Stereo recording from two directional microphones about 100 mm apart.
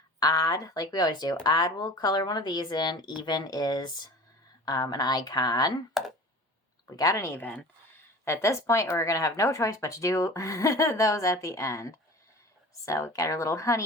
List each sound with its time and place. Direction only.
0.2 s speech: 40° left (ahead or behind)
6.0 s a sound: centre (ahead or behind)
6.9 s speech: 30° left (ahead or behind)